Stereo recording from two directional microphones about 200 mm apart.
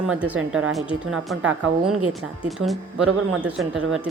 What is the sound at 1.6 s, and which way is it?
Speech, 90° right.